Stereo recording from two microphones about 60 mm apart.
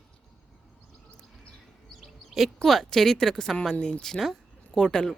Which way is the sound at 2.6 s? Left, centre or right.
Centre.